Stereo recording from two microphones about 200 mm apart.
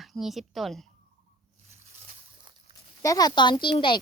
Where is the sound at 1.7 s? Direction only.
35° right (ahead or behind).